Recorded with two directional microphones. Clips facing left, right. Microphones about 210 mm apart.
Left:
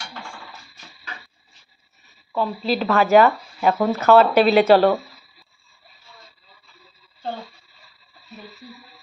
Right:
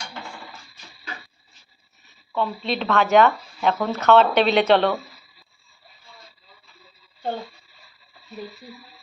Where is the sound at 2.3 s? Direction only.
5° left (ahead or behind).